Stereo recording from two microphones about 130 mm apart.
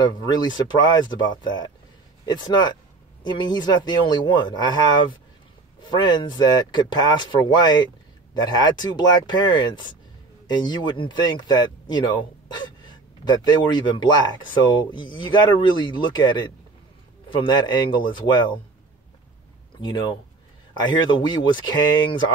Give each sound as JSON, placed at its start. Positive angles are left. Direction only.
{"t": 0.0, "sound": "speech", "side_deg": 35}
{"t": 20.7, "sound": "speech", "side_deg": 35}